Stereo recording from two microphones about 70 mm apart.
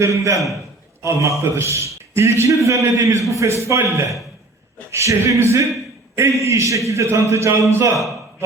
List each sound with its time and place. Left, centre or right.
0.0 s a man's voice: right
2.6 s a man's voice: right
4.9 s a man's voice: right